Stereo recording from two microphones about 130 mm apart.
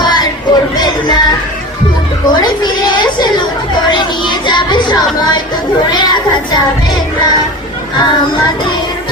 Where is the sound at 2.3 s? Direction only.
35° left (ahead or behind).